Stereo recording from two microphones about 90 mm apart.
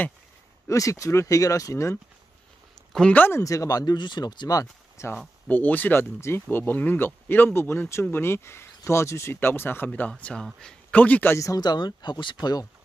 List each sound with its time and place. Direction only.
0.7 s speech: 35° left (ahead or behind)
2.9 s speech: 10° left (ahead or behind)
3.2 s speech: 25° left (ahead or behind)
3.4 s speech: 40° left (ahead or behind)
5.5 s a man's voice: 20° left (ahead or behind)
11.3 s speech: 35° left (ahead or behind)
11.6 s speech: 50° left (ahead or behind)